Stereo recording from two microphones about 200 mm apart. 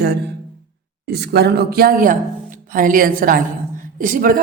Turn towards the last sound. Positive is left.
turn(degrees=-45)  # may be behind; listen again after turning